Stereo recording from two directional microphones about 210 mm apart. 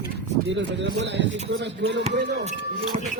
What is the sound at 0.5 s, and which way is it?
Speech, 55° right (ahead or behind).